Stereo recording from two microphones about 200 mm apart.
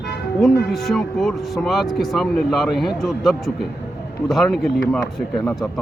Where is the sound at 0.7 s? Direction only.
Centre (ahead or behind).